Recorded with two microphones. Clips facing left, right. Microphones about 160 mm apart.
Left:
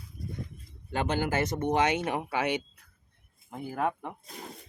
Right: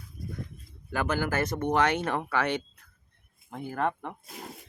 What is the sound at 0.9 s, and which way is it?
Speech, 25° left (ahead or behind).